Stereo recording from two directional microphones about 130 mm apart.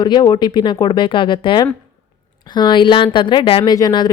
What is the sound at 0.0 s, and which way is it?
Speech, 30° left (ahead or behind).